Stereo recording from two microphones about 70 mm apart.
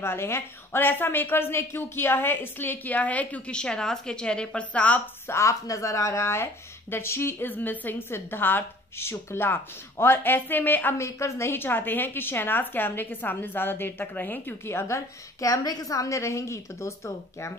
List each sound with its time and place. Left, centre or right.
0.0 s a woman's voice: left; by 5.0 s centre
5.3 s a woman's voice: left
11.0 s a woman's voice: left